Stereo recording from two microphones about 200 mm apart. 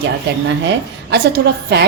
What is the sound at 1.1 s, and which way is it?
Speech, 55° right (ahead or behind).